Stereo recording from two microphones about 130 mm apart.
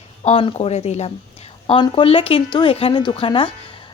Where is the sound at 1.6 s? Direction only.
40° left (ahead or behind).